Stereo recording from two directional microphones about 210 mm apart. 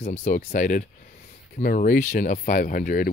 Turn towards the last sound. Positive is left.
turn(degrees=40)  # may be behind; listen again after turning